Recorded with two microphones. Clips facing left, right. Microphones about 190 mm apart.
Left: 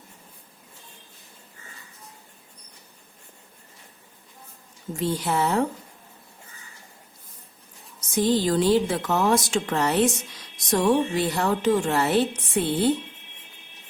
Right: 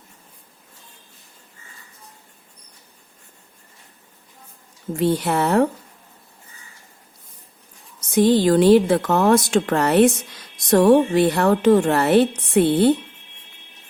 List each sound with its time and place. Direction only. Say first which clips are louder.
4.9 s a woman's voice: right 5 dB; 60° right (ahead or behind)
8.1 s a woman's voice: right 6 dB; 65° right (ahead or behind)